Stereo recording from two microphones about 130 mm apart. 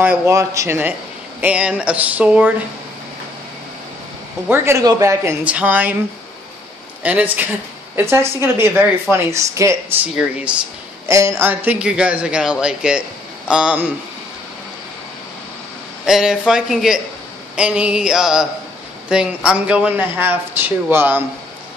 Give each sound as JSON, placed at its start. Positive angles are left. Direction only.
{"t": 0.0, "sound": "speech", "side_deg": -15}
{"t": 4.5, "sound": "a woman's voice", "side_deg": -20}
{"t": 5.4, "sound": "speech", "side_deg": -10}
{"t": 7.0, "sound": "a woman's voice", "side_deg": -10}
{"t": 11.1, "sound": "speech", "side_deg": -20}
{"t": 16.1, "sound": "speech", "side_deg": -5}